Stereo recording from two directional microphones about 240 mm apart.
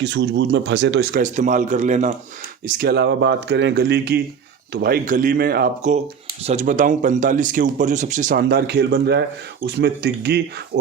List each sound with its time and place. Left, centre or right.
0.0 s speech: right
1.2 s speech: right